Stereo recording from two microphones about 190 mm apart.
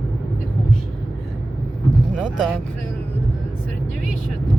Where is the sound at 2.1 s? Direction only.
Centre (ahead or behind).